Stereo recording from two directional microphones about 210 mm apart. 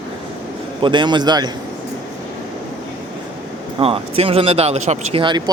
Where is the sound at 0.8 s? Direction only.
20° right (ahead or behind).